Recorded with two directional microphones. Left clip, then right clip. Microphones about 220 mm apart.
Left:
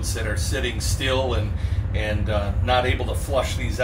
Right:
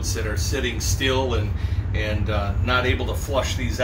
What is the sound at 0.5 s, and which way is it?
Speech, centre (ahead or behind).